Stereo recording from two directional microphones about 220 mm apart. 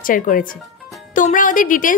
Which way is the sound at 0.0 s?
40° left (ahead or behind).